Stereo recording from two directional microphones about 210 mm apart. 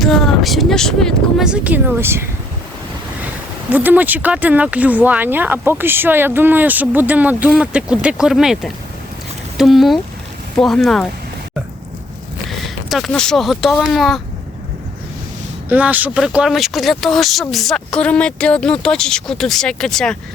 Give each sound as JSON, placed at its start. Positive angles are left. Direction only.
{"t": 0.0, "sound": "speech", "side_deg": 0}
{"t": 3.7, "sound": "speech", "side_deg": -10}
{"t": 12.5, "sound": "speech", "side_deg": 0}
{"t": 15.7, "sound": "speech", "side_deg": -5}